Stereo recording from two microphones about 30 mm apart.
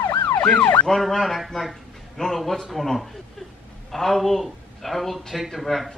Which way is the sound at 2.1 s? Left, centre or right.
Centre.